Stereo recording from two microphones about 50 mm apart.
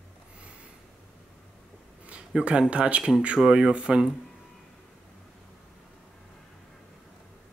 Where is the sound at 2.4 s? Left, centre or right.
Right.